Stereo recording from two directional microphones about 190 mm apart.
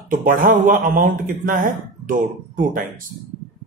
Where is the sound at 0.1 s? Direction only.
40° right (ahead or behind).